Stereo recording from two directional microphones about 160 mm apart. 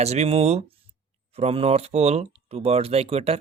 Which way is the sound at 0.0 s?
45° right (ahead or behind).